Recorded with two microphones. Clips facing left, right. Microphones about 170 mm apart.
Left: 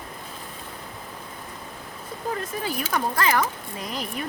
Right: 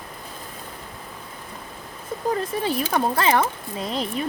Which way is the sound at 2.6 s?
30° right (ahead or behind).